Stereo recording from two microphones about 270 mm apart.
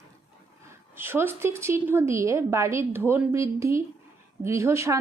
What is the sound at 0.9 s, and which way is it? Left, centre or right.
Speech, centre.